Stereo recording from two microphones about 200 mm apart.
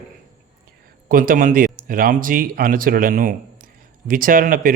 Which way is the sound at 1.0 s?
45° right (ahead or behind).